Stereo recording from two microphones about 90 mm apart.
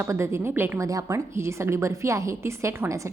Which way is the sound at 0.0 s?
30° right (ahead or behind).